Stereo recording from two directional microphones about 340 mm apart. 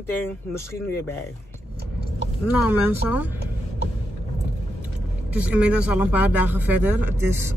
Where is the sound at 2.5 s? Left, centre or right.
Centre.